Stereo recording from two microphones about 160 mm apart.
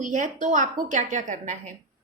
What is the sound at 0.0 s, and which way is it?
A woman's voice, 55° right (ahead or behind).